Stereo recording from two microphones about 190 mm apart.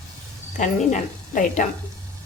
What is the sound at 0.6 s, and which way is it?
A woman's voice, 40° left (ahead or behind).